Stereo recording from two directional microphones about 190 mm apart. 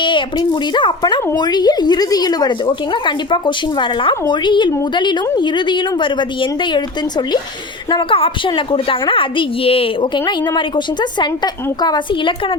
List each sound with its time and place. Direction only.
0.0 s a woman's voice: 25° left (ahead or behind)
7.9 s a woman's voice: 25° left (ahead or behind)